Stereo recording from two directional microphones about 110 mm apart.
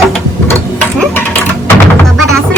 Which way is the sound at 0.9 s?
15° left (ahead or behind).